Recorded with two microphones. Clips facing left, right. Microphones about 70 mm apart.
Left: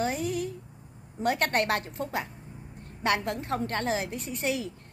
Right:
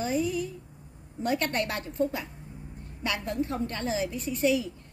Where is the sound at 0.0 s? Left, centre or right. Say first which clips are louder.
Right 1 dB; left.